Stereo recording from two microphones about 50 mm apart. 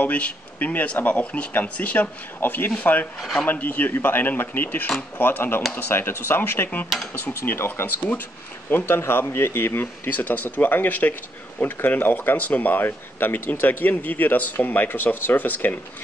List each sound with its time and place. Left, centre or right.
0.0 s speech: left
3.2 s speech: centre
3.4 s speech: left
6.9 s speech: centre
7.3 s speech: left